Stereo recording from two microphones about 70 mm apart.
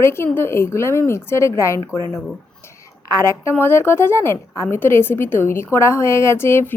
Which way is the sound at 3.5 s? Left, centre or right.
Left.